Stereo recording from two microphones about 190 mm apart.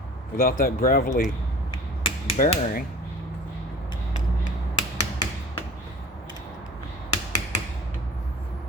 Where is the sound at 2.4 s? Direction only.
45° left (ahead or behind).